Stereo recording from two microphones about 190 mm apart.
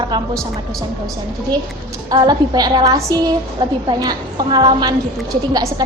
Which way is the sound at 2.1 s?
20° right (ahead or behind).